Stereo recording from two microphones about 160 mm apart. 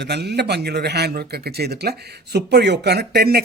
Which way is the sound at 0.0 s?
90° right.